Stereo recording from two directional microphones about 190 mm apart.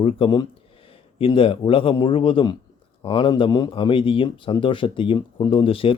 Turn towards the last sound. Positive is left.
turn(degrees=30)  # may be behind; listen again after turning